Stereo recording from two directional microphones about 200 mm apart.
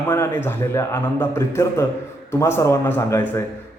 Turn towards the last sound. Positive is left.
turn(degrees=10)  # may be behind; listen again after turning